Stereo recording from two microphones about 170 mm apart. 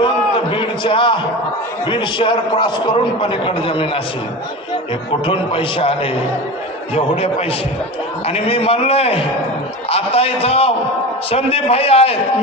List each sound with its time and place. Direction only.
0.0 s a sound: 30° left (ahead or behind)
1.9 s a man's voice: 30° left (ahead or behind)
5.2 s a man's voice: 30° left (ahead or behind)
8.3 s a man's voice: 35° left (ahead or behind)